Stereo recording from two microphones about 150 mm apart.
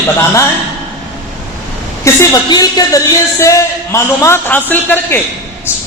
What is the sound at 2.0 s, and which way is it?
A man's voice, 25° left (ahead or behind).